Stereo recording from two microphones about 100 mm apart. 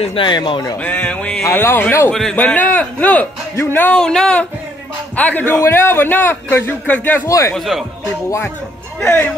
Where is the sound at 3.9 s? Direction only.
5° left (ahead or behind).